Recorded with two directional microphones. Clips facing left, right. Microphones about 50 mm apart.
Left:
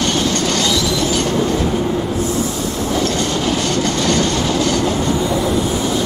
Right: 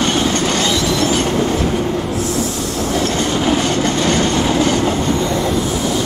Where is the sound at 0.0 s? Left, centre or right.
Right.